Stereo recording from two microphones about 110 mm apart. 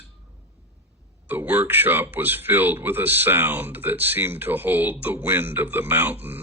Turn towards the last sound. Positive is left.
turn(degrees=-15)  # may be behind; listen again after turning